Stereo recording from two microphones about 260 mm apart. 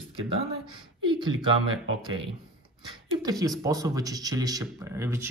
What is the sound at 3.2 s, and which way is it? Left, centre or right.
Speech, centre.